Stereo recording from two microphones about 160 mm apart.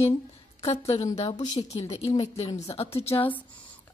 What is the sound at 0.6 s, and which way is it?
Speech, 40° left (ahead or behind).